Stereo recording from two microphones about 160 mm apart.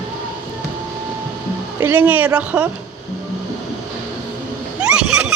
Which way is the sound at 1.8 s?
10° right (ahead or behind).